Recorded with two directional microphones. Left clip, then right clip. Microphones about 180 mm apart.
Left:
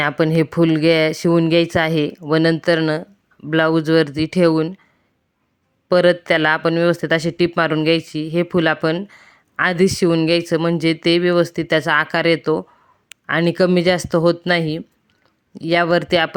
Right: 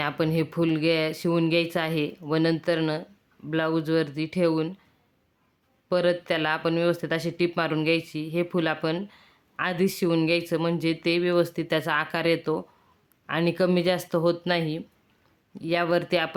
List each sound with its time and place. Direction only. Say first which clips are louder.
0.0 s speech: left 9 dB; 35° left (ahead or behind)
5.9 s speech: left 10 dB; 40° left (ahead or behind)